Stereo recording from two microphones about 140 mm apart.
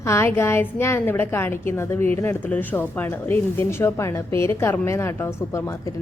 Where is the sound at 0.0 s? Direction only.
20° left (ahead or behind).